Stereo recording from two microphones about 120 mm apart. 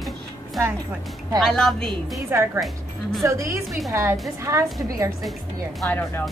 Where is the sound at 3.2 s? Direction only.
25° right (ahead or behind).